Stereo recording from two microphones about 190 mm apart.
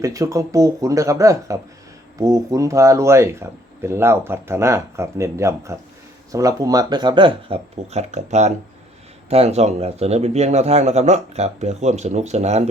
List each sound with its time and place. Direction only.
0.0 s speech: 15° right (ahead or behind); by 12.6 s 35° right (ahead or behind)